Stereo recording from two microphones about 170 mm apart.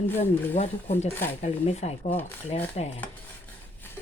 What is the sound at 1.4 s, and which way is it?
Speech, 40° left (ahead or behind).